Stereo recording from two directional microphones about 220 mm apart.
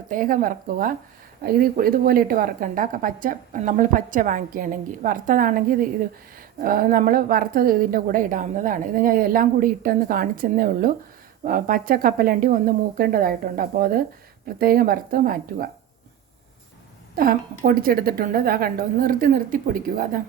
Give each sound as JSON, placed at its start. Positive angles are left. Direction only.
{"t": 0.1, "sound": "a woman's voice", "side_deg": -40}
{"t": 17.2, "sound": "a woman's voice", "side_deg": -40}